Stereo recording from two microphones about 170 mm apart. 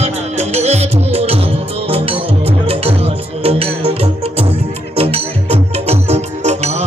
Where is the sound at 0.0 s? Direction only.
40° right (ahead or behind).